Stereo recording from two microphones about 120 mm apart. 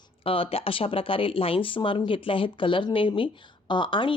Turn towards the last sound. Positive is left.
turn(degrees=45)  # may be behind; listen again after turning